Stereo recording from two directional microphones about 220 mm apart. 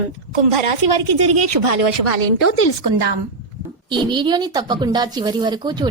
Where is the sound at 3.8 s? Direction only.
20° right (ahead or behind).